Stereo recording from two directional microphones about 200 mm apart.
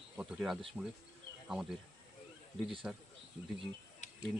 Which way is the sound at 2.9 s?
5° right (ahead or behind).